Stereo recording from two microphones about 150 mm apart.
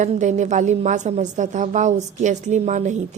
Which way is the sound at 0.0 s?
55° right (ahead or behind).